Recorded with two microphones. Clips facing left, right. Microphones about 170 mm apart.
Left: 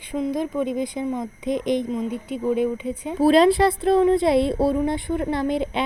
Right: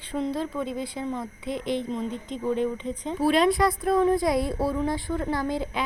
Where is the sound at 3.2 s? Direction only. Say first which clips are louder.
Left 6 dB; 35° left (ahead or behind).